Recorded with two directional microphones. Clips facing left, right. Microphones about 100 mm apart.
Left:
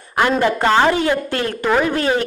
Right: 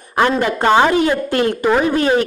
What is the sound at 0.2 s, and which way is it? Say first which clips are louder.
A man's voice: right 1 dB; 20° right (ahead or behind).